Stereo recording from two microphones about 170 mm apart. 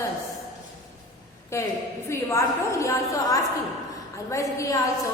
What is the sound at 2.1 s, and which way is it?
A woman's voice, 15° left (ahead or behind).